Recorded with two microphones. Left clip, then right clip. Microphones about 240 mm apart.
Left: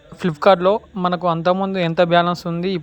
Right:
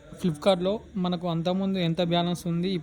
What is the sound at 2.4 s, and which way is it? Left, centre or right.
Speech, left.